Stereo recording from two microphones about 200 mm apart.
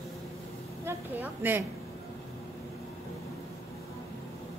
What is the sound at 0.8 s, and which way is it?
Speech, 10° right (ahead or behind).